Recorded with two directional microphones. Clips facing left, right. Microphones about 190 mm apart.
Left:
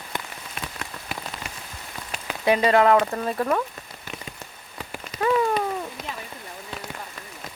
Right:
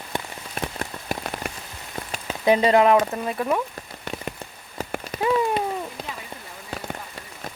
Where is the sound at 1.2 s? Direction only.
55° right (ahead or behind).